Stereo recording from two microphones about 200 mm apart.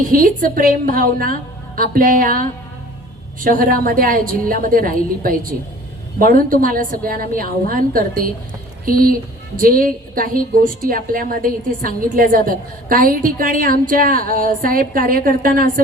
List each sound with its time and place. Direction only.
0.1 s a woman's voice: 45° right (ahead or behind)